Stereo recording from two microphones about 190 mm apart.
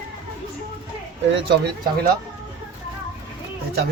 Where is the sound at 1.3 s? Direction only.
60° right (ahead or behind).